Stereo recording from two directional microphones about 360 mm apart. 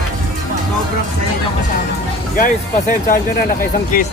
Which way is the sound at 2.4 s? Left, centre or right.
Left.